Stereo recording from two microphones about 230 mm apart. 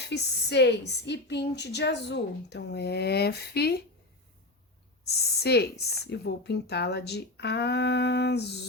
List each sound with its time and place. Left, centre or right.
0.0 s a woman's voice: left
5.0 s a woman's voice: left